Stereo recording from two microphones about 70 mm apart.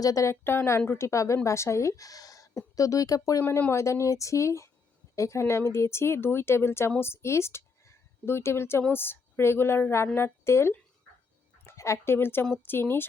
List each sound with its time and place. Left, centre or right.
0.0 s speech: left
0.4 s speech: left
3.7 s a woman's voice: left